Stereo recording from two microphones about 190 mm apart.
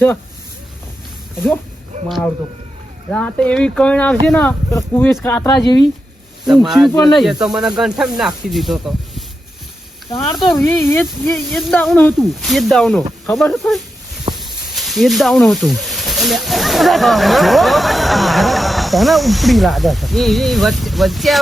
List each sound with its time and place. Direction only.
2.0 s speech: centre (ahead or behind)
5.6 s speech: 20° left (ahead or behind)
6.4 s speech: centre (ahead or behind)
10.5 s speech: centre (ahead or behind)
13.2 s a sound: centre (ahead or behind)
14.3 s speech: centre (ahead or behind)